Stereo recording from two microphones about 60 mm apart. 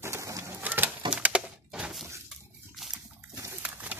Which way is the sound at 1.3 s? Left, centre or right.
Centre.